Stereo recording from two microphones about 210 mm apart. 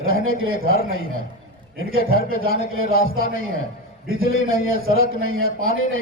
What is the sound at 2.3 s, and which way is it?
Speech, 75° right (ahead or behind).